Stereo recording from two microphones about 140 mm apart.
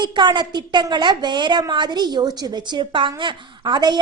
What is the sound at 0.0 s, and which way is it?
A woman's voice, 30° right (ahead or behind).